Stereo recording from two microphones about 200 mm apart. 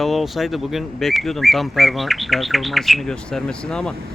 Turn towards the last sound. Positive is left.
turn(degrees=5)  # may be behind; listen again after turning